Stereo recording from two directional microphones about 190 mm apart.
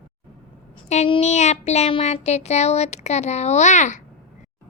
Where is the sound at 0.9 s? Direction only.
35° left (ahead or behind).